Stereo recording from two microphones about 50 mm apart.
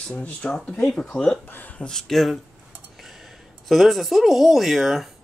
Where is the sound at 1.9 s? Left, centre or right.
Centre.